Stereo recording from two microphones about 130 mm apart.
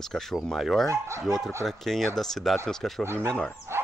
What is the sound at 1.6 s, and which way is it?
Speech, centre (ahead or behind).